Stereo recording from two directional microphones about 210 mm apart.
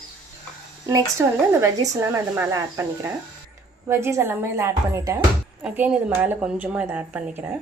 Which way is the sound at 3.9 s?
10° right (ahead or behind).